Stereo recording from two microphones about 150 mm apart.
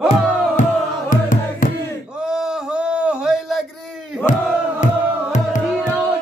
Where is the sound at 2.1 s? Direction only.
5° right (ahead or behind).